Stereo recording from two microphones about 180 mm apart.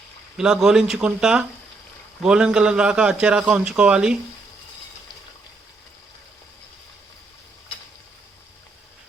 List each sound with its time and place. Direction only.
0.3 s a man's voice: 5° right (ahead or behind)